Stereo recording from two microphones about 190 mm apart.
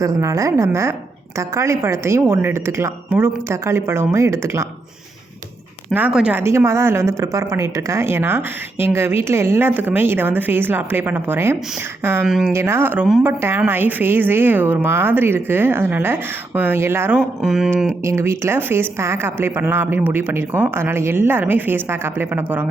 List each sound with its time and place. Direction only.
0.0 s a woman's voice: 15° right (ahead or behind)
5.9 s a woman's voice: 5° right (ahead or behind)
12.3 s speech: centre (ahead or behind)
12.5 s a woman's voice: 15° right (ahead or behind)
17.2 s speech: centre (ahead or behind)
18.0 s a woman's voice: 15° right (ahead or behind)